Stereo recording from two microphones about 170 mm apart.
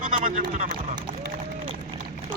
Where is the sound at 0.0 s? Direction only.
55° right (ahead or behind).